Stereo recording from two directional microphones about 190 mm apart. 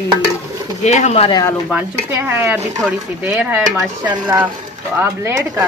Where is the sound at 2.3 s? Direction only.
10° right (ahead or behind).